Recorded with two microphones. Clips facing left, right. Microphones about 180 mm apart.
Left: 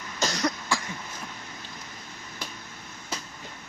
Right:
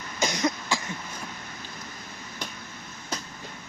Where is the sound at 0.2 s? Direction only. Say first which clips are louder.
Right 1 dB; 10° right (ahead or behind).